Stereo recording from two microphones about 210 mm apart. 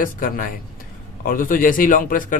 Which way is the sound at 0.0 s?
40° left (ahead or behind).